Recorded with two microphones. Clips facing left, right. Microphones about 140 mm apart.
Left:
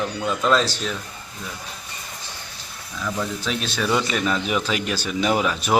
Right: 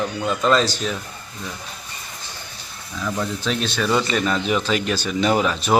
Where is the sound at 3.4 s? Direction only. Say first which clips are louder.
Right 3 dB; 5° left (ahead or behind).